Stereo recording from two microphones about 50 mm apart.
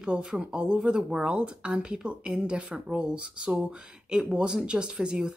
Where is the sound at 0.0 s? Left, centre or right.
Right.